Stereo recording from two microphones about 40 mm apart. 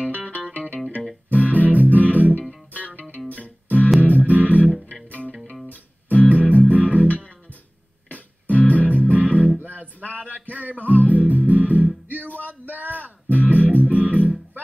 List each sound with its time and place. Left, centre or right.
0.5 s music: right
5.7 s music: left
6.2 s music: right
8.5 s music: right
10.1 s a sound: right
10.9 s music: right
12.4 s a sound: right
13.3 s music: right